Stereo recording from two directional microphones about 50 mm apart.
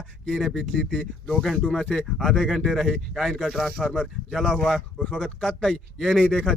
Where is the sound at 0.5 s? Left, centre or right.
Centre.